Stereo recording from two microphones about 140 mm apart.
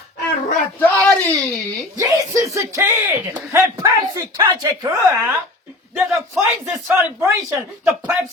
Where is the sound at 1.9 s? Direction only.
25° right (ahead or behind).